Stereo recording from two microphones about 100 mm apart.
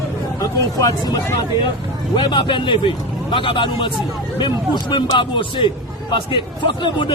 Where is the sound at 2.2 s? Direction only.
55° left (ahead or behind).